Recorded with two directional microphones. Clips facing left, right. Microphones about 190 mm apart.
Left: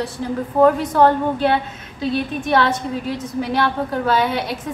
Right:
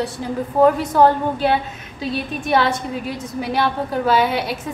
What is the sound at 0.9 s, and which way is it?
A woman's voice, 5° right (ahead or behind).